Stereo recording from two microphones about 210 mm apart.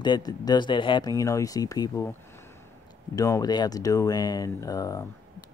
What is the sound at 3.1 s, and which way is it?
Speech, 15° left (ahead or behind).